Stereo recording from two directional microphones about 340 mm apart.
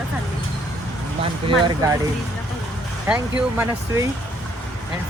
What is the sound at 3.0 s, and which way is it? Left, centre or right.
Speech, centre.